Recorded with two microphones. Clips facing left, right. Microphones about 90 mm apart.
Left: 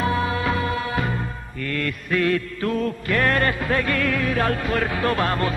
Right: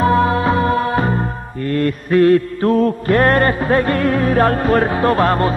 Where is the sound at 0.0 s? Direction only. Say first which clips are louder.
Right 8 dB; 40° right (ahead or behind).